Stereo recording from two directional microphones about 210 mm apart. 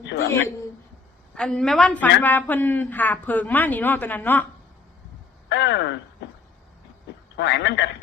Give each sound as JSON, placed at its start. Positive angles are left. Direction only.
{"t": 0.0, "sound": "speech", "side_deg": 60}
{"t": 1.4, "sound": "speech", "side_deg": 5}
{"t": 5.5, "sound": "speech", "side_deg": 55}
{"t": 7.3, "sound": "a man's voice", "side_deg": 55}